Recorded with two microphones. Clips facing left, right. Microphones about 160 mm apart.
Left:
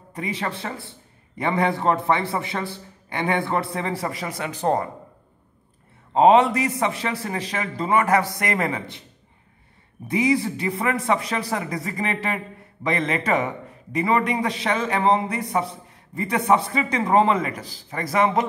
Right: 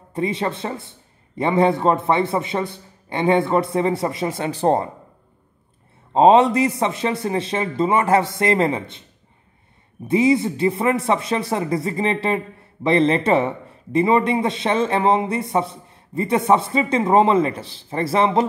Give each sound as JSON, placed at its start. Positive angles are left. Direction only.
{"t": 0.1, "sound": "a man's voice", "side_deg": -25}
{"t": 6.1, "sound": "a man's voice", "side_deg": -25}
{"t": 10.0, "sound": "a man's voice", "side_deg": -25}